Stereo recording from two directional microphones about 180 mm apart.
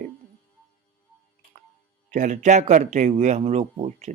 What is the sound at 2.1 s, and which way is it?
Speech, 45° right (ahead or behind).